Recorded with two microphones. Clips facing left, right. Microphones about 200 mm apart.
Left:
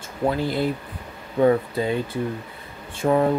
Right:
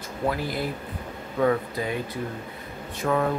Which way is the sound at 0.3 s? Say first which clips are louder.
Left 6 dB; 25° left (ahead or behind).